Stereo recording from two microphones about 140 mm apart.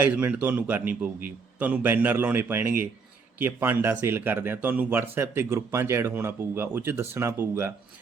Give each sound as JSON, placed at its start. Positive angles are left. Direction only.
{"t": 0.0, "sound": "speech", "side_deg": -10}